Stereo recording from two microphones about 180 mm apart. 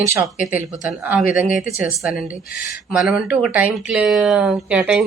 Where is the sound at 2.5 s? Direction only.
50° left (ahead or behind).